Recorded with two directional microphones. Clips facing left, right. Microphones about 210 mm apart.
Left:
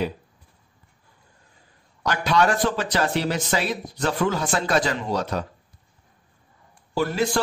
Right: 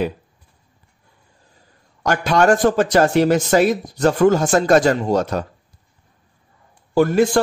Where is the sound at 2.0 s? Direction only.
50° right (ahead or behind).